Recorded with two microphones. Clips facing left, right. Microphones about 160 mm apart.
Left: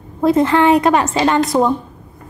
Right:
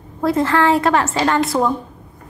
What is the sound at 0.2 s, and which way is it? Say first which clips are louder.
A woman's voice: left 4 dB; 20° left (ahead or behind).